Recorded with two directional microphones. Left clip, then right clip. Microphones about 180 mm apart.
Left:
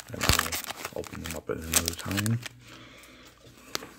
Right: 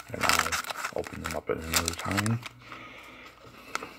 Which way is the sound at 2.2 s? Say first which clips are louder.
Right 2 dB; 45° left (ahead or behind).